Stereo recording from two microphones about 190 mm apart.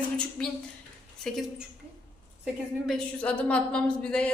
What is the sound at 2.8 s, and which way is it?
Speech, 5° left (ahead or behind).